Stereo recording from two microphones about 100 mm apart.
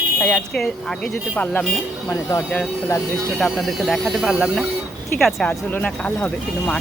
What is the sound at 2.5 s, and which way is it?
Speech, 20° left (ahead or behind).